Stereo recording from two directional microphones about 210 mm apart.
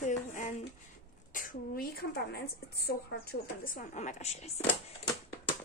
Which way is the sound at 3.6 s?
40° left (ahead or behind).